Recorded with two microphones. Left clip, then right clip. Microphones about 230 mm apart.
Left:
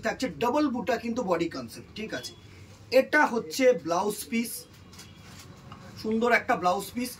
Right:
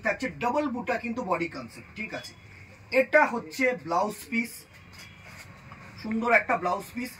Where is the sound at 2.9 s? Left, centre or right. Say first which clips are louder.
Even; centre.